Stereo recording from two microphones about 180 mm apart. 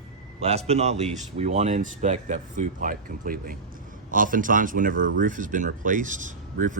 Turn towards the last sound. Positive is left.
turn(degrees=-45)  # may be behind; listen again after turning